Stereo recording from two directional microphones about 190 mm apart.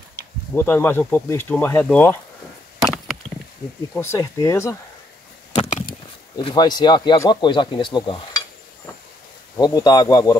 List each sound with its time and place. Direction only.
0.6 s speech: 10° left (ahead or behind)
2.8 s wood: centre (ahead or behind)
3.9 s speech: 15° left (ahead or behind)
5.6 s a sound: 40° left (ahead or behind)
6.3 s speech: 20° left (ahead or behind)
9.6 s speech: 20° left (ahead or behind)